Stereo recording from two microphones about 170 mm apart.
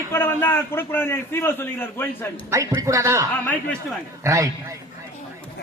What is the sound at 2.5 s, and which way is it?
Speech, 15° right (ahead or behind).